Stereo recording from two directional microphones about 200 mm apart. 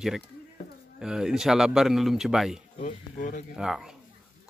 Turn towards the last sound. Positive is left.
turn(degrees=-5)  # may be behind; listen again after turning